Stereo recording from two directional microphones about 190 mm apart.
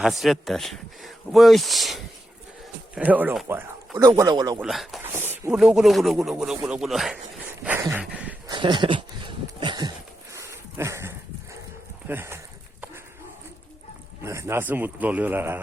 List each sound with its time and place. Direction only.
0.0 s speech: centre (ahead or behind); by 4.6 s 20° right (ahead or behind)
4.6 s speech: centre (ahead or behind)
7.6 s a sound: 10° right (ahead or behind)
8.4 s a sound: 25° right (ahead or behind)
12.0 s a man's voice: 10° right (ahead or behind)
14.3 s a man's voice: 15° right (ahead or behind)